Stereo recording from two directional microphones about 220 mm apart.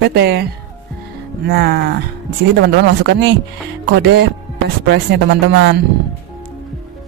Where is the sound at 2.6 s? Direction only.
50° right (ahead or behind).